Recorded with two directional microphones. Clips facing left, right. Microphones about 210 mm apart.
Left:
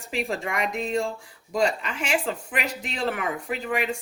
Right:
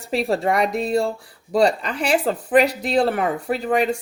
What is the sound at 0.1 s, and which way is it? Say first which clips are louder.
Speech: right 8 dB; 35° right (ahead or behind).